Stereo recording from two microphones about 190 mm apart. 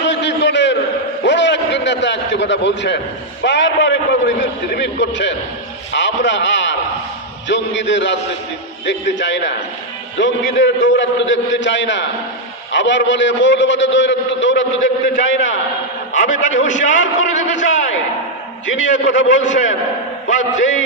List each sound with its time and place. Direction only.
0.1 s a sound: 70° left (ahead or behind)
3.4 s a man's voice: 70° left (ahead or behind)
16.1 s a man's voice: 40° left (ahead or behind)
16.5 s a man's voice: 80° left